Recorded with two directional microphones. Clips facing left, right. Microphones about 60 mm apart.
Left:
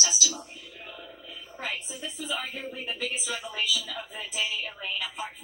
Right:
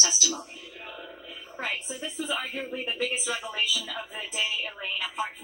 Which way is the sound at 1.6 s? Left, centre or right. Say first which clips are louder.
Right 2 dB; right.